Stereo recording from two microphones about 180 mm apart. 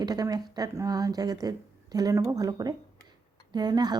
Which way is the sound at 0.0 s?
20° right (ahead or behind).